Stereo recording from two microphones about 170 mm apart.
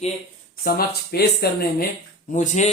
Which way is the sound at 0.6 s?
70° left (ahead or behind).